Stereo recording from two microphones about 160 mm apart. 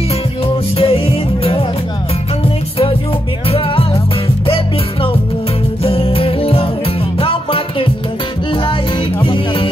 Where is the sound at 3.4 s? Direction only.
35° left (ahead or behind).